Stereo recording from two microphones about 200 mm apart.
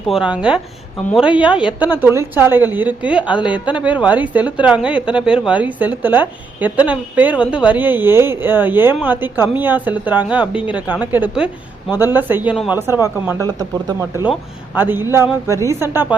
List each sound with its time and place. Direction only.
0.1 s a woman's voice: 5° right (ahead or behind)